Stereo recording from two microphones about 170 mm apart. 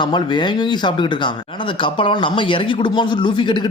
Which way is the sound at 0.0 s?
25° left (ahead or behind).